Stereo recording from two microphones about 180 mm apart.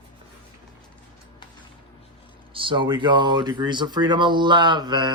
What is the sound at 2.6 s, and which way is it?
Speech, 30° right (ahead or behind).